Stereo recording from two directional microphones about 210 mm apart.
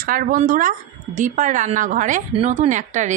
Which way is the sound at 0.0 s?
40° right (ahead or behind).